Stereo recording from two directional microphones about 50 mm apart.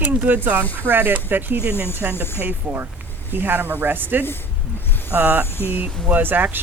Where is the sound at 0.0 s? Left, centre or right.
Right.